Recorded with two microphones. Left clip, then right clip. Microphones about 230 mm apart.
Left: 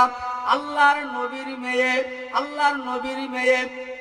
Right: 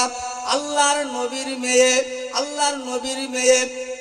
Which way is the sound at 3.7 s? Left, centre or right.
Right.